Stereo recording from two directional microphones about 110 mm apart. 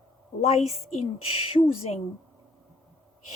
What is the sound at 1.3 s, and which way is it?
Speech, 60° left (ahead or behind).